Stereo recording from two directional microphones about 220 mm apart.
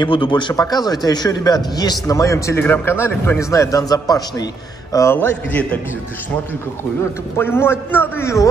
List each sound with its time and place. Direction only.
0.0 s a man's voice: 20° left (ahead or behind)
7.3 s a man's voice: 10° left (ahead or behind)